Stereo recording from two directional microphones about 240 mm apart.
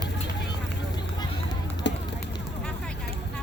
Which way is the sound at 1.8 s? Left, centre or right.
Left.